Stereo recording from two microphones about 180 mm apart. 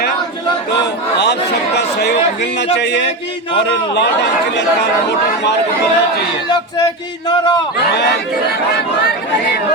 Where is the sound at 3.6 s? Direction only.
75° left (ahead or behind).